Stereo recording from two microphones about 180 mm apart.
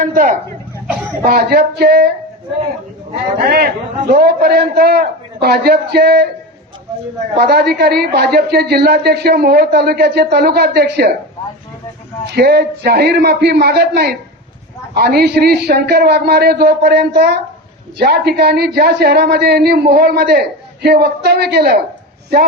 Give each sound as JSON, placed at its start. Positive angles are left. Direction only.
{"t": 0.0, "sound": "a woman's voice", "side_deg": -50}
{"t": 3.4, "sound": "a woman's voice", "side_deg": -55}
{"t": 7.3, "sound": "a woman's voice", "side_deg": -60}
{"t": 12.2, "sound": "a woman's voice", "side_deg": -65}